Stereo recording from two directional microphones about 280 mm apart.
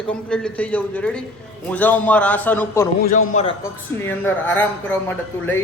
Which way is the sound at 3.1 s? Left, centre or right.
Left.